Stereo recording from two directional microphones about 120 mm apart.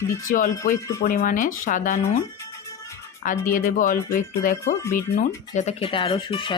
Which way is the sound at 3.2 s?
90° left.